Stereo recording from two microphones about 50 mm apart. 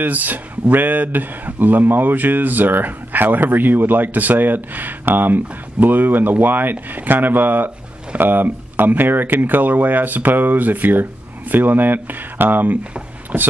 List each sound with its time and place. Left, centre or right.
0.0 s speech: right